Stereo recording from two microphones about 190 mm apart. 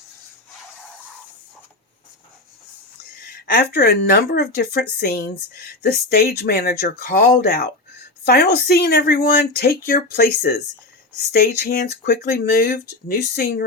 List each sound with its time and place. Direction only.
3.4 s speech: 50° left (ahead or behind)